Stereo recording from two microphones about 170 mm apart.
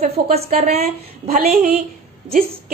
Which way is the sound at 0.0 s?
40° right (ahead or behind).